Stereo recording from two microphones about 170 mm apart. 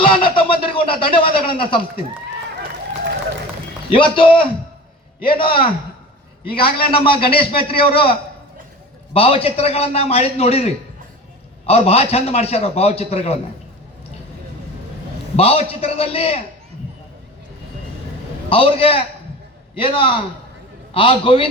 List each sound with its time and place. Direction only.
0.0 s speech: 30° left (ahead or behind)
3.9 s a man's voice: 30° left (ahead or behind)
6.6 s a man's voice: 30° left (ahead or behind)
9.1 s a man's voice: 35° left (ahead or behind)
15.4 s a man's voice: 35° left (ahead or behind)
18.4 s a man's voice: 35° left (ahead or behind)